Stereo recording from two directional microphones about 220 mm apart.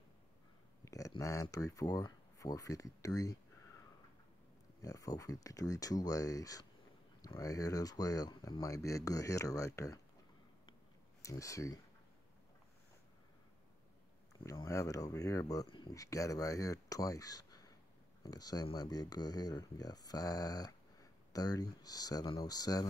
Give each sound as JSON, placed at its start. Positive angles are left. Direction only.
{"t": 0.8, "sound": "speech", "side_deg": 15}
{"t": 4.8, "sound": "speech", "side_deg": 15}
{"t": 11.2, "sound": "speech", "side_deg": 15}
{"t": 14.4, "sound": "speech", "side_deg": 15}